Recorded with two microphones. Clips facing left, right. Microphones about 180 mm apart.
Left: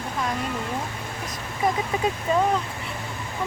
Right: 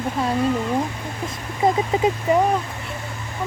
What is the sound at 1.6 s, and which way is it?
Speech, 25° right (ahead or behind).